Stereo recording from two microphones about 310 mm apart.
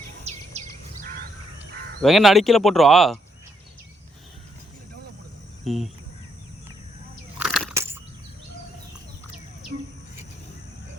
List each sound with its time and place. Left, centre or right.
0.3 s bird vocalization: right
2.0 s speech: centre
5.6 s speech: centre
7.3 s a sound: centre